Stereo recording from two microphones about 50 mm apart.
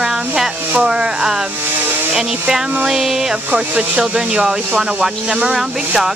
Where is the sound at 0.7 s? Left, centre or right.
Right.